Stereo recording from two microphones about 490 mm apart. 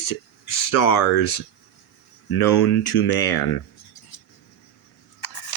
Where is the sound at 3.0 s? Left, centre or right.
Left.